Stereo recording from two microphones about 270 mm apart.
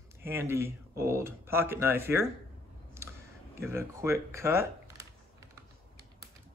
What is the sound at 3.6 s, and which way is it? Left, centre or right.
Speech, centre.